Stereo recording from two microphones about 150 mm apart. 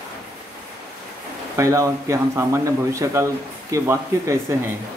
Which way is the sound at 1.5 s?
20° right (ahead or behind).